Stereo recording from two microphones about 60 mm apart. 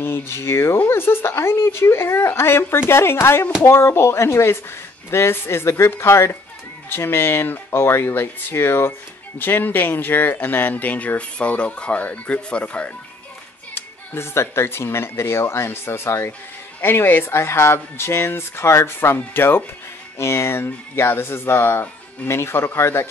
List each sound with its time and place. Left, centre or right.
0.0 s speech: left
13.7 s speech: left
20.2 s speech: left